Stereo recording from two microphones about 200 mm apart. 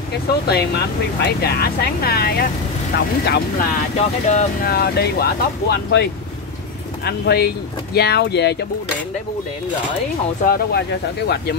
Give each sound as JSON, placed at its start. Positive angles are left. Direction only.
{"t": 0.5, "sound": "speech", "side_deg": 55}
{"t": 4.3, "sound": "speech", "side_deg": 45}
{"t": 7.1, "sound": "speech", "side_deg": 55}
{"t": 10.4, "sound": "speech", "side_deg": 50}